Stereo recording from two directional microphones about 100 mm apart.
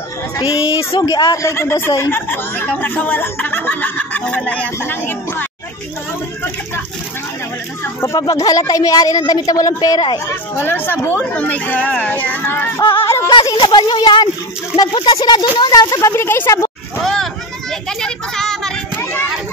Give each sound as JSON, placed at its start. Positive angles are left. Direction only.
{"t": 0.5, "sound": "a woman's voice", "side_deg": 65}
{"t": 1.0, "sound": "speech", "side_deg": 40}
{"t": 1.4, "sound": "speech", "side_deg": 30}
{"t": 8.0, "sound": "speech", "side_deg": 35}
{"t": 10.3, "sound": "speech", "side_deg": 20}
{"t": 12.9, "sound": "a sound", "side_deg": 25}
{"t": 13.5, "sound": "speech", "side_deg": 50}
{"t": 14.7, "sound": "speech", "side_deg": -10}
{"t": 15.2, "sound": "speech", "side_deg": 50}
{"t": 15.7, "sound": "speech", "side_deg": 40}
{"t": 16.1, "sound": "speech", "side_deg": 25}
{"t": 17.0, "sound": "a sound", "side_deg": 5}